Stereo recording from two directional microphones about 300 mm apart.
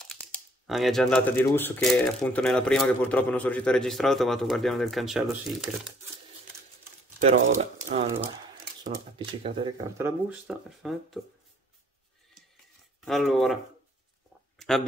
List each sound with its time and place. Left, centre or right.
0.7 s speech: centre
7.2 s speech: right
9.2 s speech: centre
13.0 s speech: centre